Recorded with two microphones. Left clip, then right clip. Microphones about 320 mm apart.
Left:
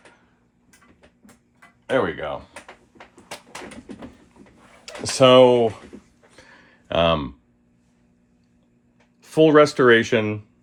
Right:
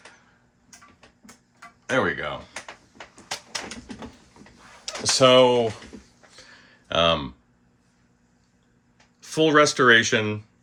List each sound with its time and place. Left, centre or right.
1.5 s tick-tock: centre
4.9 s speech: left
6.3 s a sound: centre
9.2 s speech: centre